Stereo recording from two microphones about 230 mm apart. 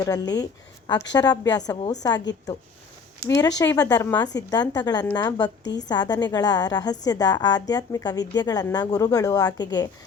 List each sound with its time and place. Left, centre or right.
0.0 s a woman's voice: centre
3.2 s a woman's voice: centre